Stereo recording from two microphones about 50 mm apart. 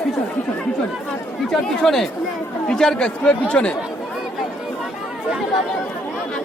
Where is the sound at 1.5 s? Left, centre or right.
Centre; by 3.8 s left.